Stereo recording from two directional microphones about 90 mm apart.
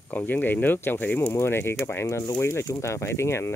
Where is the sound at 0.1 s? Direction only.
20° left (ahead or behind).